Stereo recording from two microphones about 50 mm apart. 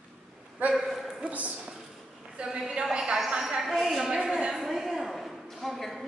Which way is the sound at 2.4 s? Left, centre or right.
Centre.